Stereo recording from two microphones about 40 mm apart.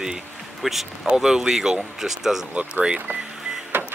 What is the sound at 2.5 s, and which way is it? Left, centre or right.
Speech, right.